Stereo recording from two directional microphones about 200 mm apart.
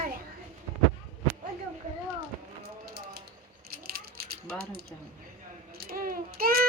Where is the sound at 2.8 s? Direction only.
50° right (ahead or behind).